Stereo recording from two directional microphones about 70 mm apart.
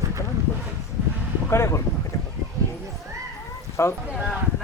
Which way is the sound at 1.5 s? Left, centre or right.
Left.